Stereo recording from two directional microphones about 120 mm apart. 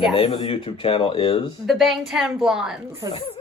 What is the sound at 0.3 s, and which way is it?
Speech, 35° left (ahead or behind).